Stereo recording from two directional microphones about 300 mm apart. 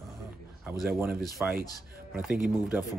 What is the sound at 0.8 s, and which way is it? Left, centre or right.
Speech, centre.